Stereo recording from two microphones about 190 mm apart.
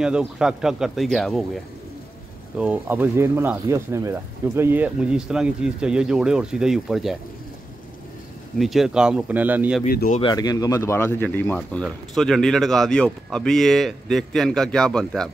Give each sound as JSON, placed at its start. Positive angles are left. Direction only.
{"t": 0.0, "sound": "speech", "side_deg": -5}
{"t": 8.5, "sound": "speech", "side_deg": 0}
{"t": 9.8, "sound": "speech", "side_deg": 50}
{"t": 10.3, "sound": "speech", "side_deg": 20}